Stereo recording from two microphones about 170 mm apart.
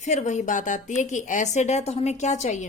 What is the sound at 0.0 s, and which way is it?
A woman's voice, 45° left (ahead or behind).